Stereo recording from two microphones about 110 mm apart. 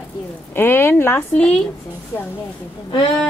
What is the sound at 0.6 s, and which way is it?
Speech, 20° left (ahead or behind).